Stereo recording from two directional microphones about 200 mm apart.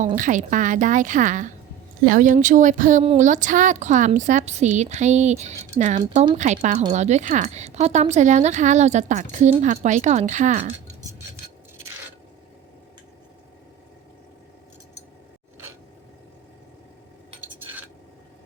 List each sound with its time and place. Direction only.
0.0 s a woman's voice: 40° right (ahead or behind)